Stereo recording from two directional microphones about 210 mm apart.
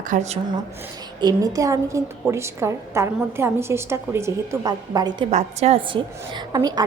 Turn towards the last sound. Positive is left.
turn(degrees=-20)  # may be behind; listen again after turning